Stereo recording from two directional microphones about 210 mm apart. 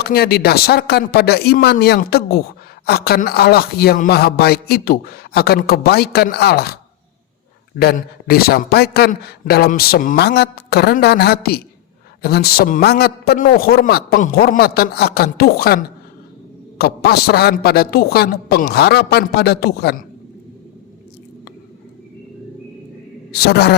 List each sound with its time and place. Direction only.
0.0 s a man's voice: 50° left (ahead or behind)
7.8 s a man's voice: 45° left (ahead or behind)
23.3 s a man's voice: 50° left (ahead or behind)